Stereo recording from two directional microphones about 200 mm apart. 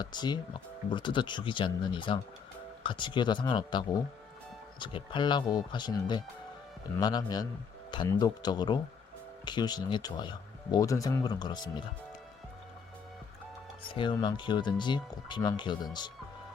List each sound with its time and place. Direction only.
0.0 s speech: 20° left (ahead or behind)
13.9 s speech: 25° left (ahead or behind)